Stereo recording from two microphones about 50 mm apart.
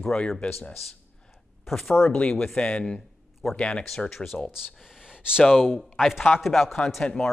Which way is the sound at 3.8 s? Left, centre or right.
Centre.